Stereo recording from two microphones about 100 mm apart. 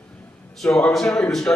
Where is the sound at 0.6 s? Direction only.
10° left (ahead or behind).